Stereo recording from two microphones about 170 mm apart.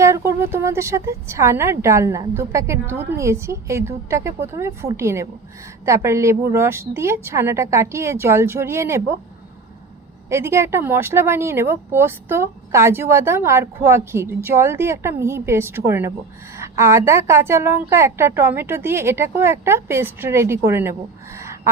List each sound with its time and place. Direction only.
0.0 s speech: 15° right (ahead or behind)
10.2 s speech: 15° right (ahead or behind)
21.3 s a sound: 15° right (ahead or behind)